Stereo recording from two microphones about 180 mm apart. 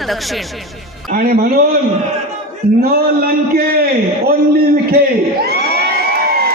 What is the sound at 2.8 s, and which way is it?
A man's voice, 55° right (ahead or behind).